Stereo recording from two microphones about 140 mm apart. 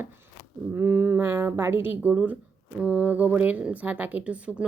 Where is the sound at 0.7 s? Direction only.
15° right (ahead or behind).